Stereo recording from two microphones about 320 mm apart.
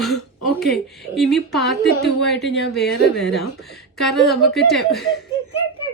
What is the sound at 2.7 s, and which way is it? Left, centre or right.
A woman's voice, centre.